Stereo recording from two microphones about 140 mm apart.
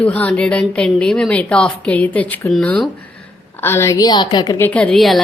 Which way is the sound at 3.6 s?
20° left (ahead or behind).